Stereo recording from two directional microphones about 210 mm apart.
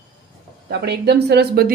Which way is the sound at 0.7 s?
50° right (ahead or behind).